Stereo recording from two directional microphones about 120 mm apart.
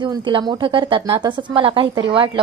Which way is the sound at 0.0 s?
40° right (ahead or behind).